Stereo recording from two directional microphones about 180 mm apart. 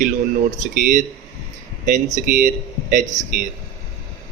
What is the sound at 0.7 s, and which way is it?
Speech, 45° right (ahead or behind).